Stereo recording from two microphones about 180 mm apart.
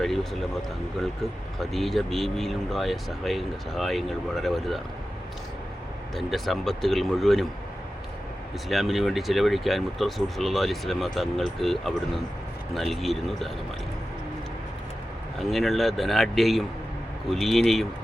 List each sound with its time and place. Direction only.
1.7 s speech: centre (ahead or behind)
6.1 s speech: centre (ahead or behind)
8.7 s speech: centre (ahead or behind)
15.4 s speech: centre (ahead or behind)